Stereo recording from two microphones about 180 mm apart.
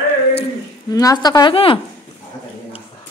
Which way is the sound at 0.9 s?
20° left (ahead or behind).